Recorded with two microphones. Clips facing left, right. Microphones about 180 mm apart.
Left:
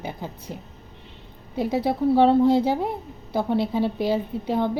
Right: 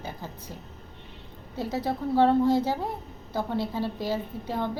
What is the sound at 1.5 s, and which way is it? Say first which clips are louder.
A woman's voice: left 6 dB; 15° left (ahead or behind).